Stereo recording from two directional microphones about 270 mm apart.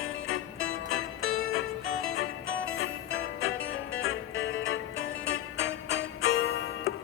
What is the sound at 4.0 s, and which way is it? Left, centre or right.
Music, left.